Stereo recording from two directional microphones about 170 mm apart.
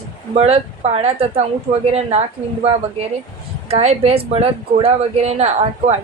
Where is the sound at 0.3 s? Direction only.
35° right (ahead or behind).